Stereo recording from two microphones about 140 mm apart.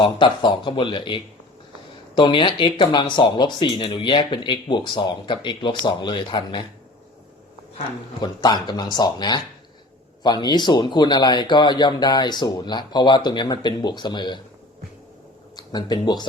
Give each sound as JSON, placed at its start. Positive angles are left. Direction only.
{"t": 0.0, "sound": "speech", "side_deg": 35}
{"t": 8.2, "sound": "speech", "side_deg": 30}
{"t": 15.5, "sound": "speech", "side_deg": 30}